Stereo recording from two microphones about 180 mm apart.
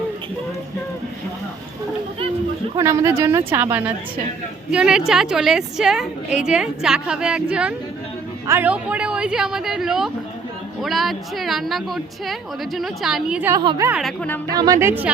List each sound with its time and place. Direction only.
2.7 s a woman's voice: 15° right (ahead or behind)
13.5 s a woman's voice: 20° right (ahead or behind)
14.0 s a woman's voice: 5° left (ahead or behind)
14.5 s a woman's voice: 20° right (ahead or behind)